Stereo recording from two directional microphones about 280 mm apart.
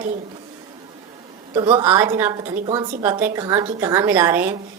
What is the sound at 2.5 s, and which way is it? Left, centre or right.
Speech, right.